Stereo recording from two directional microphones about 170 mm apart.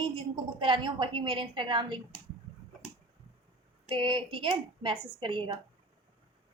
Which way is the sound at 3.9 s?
30° right (ahead or behind).